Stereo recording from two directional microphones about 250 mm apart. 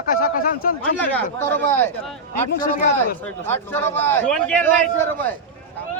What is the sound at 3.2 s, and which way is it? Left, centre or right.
A man's voice, centre.